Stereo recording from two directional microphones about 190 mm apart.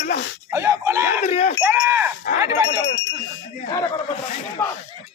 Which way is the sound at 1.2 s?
35° left (ahead or behind).